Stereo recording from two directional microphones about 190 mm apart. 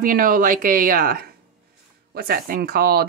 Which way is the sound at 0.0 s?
45° right (ahead or behind).